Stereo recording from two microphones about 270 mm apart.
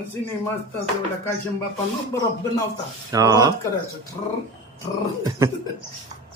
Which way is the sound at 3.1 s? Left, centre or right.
Centre.